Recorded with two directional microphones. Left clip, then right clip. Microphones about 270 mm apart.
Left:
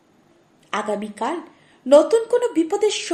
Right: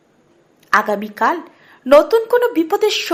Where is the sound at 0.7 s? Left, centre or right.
Centre.